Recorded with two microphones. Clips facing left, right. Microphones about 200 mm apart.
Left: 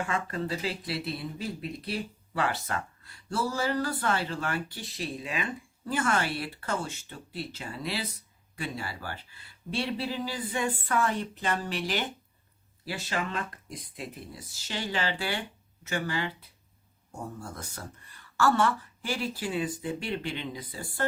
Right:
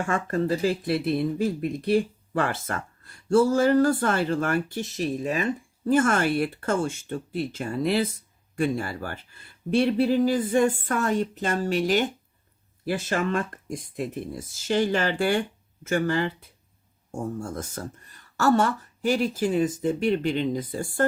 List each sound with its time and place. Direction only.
0.0 s speech: 45° right (ahead or behind)